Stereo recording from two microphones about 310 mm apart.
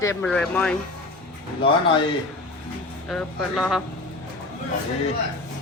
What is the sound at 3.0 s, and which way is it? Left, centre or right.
Speech, centre.